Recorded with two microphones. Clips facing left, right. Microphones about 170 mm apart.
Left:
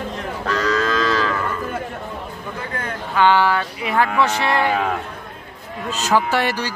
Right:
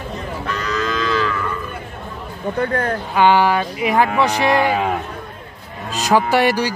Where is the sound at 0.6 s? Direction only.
40° left (ahead or behind).